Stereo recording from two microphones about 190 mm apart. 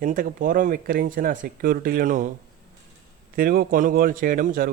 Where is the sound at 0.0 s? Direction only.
45° right (ahead or behind).